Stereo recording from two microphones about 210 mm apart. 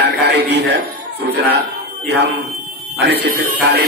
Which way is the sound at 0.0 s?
50° right (ahead or behind).